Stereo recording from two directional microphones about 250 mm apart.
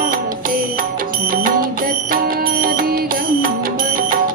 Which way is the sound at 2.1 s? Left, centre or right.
Right.